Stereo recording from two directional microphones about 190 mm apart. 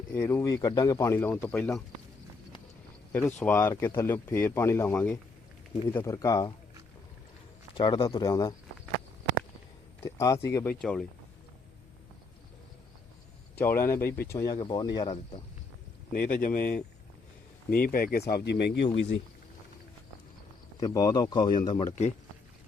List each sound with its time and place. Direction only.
0.1 s speech: 15° left (ahead or behind)
3.1 s speech: 10° left (ahead or behind)
7.8 s speech: 25° left (ahead or behind)
10.0 s speech: 15° left (ahead or behind)
10.8 s speech: 5° left (ahead or behind)
13.6 s speech: 10° left (ahead or behind)
16.4 s speech: 45° left (ahead or behind); by 19.0 s 65° left (ahead or behind)
20.7 s speech: 20° left (ahead or behind)